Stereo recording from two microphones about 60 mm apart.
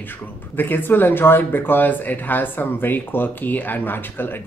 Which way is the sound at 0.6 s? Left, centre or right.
Left.